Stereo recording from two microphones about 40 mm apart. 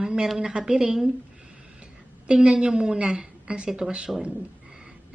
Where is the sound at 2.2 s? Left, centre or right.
Right.